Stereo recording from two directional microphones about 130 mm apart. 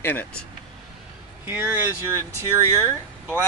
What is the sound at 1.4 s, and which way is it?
Speech, 15° right (ahead or behind).